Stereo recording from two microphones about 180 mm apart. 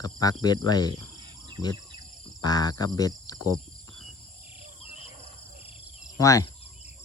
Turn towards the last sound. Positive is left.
turn(degrees=20)  # may be behind; listen again after turning